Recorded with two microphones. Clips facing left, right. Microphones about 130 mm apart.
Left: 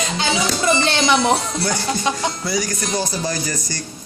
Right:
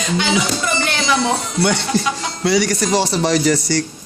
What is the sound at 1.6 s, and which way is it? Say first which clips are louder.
Speech: right 4 dB; 75° right (ahead or behind).